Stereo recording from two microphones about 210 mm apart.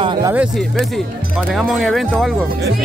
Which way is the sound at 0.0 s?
20° right (ahead or behind).